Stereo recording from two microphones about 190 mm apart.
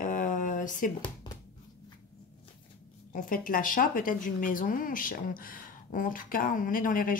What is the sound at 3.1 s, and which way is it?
Speech, 45° left (ahead or behind).